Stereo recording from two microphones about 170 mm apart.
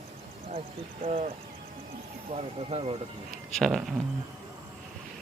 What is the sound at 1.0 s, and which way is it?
Speech, 35° right (ahead or behind).